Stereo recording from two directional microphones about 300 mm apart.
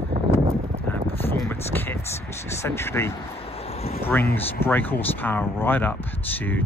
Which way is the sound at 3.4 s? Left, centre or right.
Centre.